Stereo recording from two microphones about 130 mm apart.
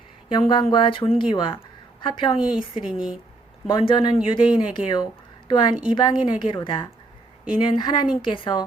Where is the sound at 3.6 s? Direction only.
40° left (ahead or behind).